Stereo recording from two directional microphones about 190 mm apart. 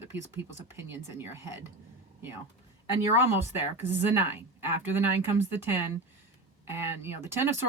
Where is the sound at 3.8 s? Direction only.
35° left (ahead or behind).